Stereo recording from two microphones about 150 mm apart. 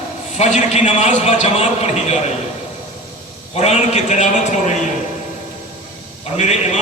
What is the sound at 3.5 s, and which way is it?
A man's voice, 45° left (ahead or behind).